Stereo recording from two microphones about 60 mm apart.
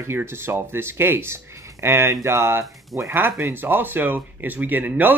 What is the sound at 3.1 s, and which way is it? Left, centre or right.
Speech, right.